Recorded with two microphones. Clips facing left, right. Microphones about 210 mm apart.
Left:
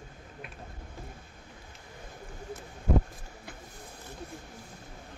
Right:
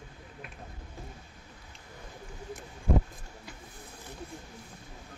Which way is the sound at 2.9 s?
5° left (ahead or behind).